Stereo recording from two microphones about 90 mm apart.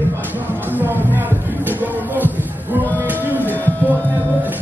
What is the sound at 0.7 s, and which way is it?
Music, 20° right (ahead or behind).